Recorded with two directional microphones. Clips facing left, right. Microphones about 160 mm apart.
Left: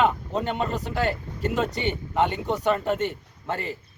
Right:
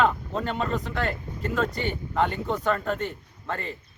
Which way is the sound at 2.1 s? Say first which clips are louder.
Left 1 dB; 20° left (ahead or behind).